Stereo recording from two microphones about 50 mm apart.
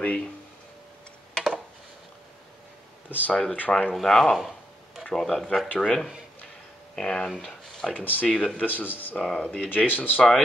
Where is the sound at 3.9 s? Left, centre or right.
Centre.